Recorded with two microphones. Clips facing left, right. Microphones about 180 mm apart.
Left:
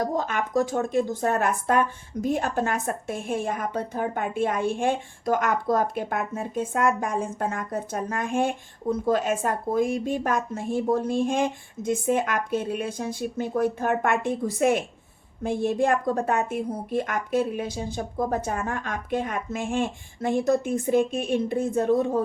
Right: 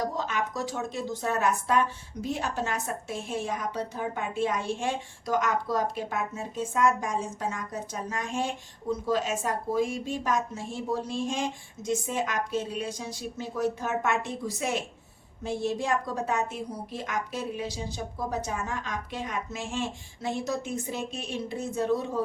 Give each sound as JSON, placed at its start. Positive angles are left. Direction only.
{"t": 0.0, "sound": "speech", "side_deg": 50}